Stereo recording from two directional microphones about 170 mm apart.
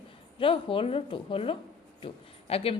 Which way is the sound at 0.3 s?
30° left (ahead or behind).